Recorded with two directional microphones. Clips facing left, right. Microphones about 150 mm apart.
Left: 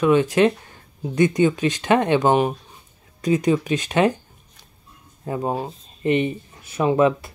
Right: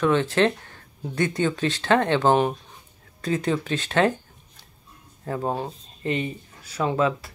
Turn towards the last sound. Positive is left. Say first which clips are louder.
# left 5 dB
turn(degrees=20)  # may be behind; listen again after turning